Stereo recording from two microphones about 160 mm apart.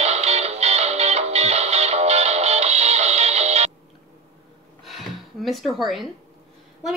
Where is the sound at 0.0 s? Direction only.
40° right (ahead or behind).